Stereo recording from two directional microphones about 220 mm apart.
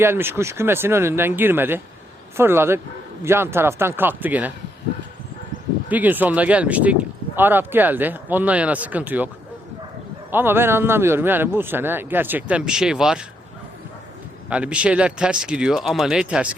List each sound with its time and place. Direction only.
0.0 s speech: 10° right (ahead or behind)
5.9 s speech: 10° right (ahead or behind)
10.3 s speech: 10° right (ahead or behind)
14.5 s speech: 5° right (ahead or behind)